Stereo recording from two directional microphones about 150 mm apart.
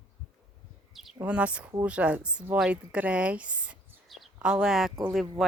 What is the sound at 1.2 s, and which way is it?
A woman's voice, 10° right (ahead or behind).